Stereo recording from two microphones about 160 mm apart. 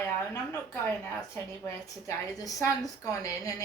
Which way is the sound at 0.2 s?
15° left (ahead or behind).